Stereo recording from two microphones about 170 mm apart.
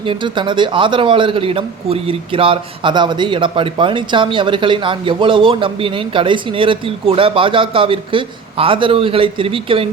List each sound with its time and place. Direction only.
0.1 s a man's voice: 30° right (ahead or behind)